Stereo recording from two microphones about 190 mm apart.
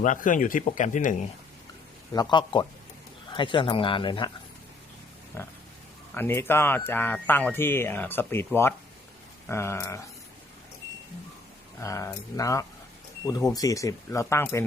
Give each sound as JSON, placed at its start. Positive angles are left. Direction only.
{"t": 0.0, "sound": "speech", "side_deg": 45}
{"t": 2.1, "sound": "speech", "side_deg": 25}
{"t": 5.3, "sound": "speech", "side_deg": 10}
{"t": 11.8, "sound": "speech", "side_deg": 15}